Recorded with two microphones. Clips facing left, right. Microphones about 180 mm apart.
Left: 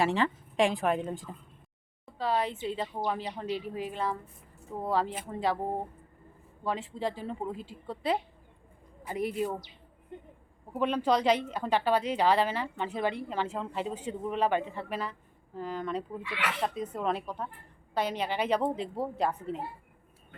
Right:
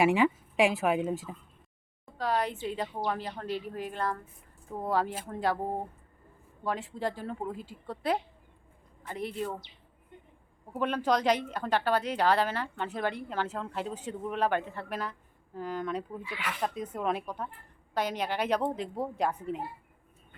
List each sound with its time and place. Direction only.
0.0 s speech: 10° right (ahead or behind)
2.7 s speech: 5° left (ahead or behind)
6.7 s a woman's voice: centre (ahead or behind)
10.7 s speech: centre (ahead or behind)
16.2 s speech: 75° left (ahead or behind)
16.6 s speech: centre (ahead or behind)